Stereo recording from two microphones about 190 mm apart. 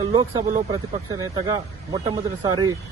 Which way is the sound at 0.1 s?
20° right (ahead or behind).